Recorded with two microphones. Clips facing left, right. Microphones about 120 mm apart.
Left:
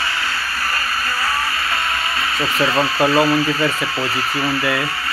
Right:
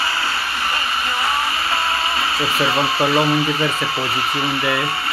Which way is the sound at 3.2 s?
25° right (ahead or behind).